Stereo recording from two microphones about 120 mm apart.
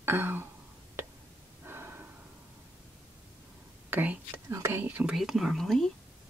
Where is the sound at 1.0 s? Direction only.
20° right (ahead or behind).